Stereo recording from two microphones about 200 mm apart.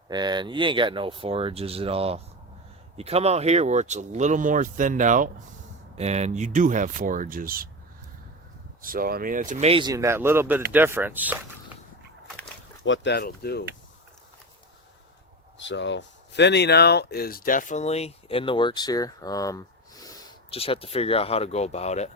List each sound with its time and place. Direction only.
0.1 s speech: 20° right (ahead or behind); by 7.7 s 45° right (ahead or behind)
8.8 s speech: 45° right (ahead or behind); by 11.3 s 10° right (ahead or behind)
12.8 s speech: 65° left (ahead or behind)
15.5 s speech: 65° left (ahead or behind); by 22.1 s 35° left (ahead or behind)